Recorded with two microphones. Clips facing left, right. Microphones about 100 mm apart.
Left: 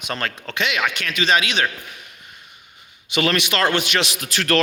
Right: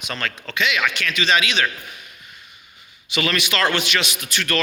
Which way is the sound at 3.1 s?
55° left (ahead or behind).